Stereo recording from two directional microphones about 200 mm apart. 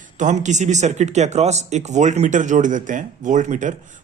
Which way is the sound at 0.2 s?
40° right (ahead or behind).